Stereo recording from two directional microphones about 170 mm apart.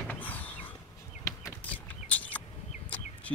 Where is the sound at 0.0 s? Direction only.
10° left (ahead or behind).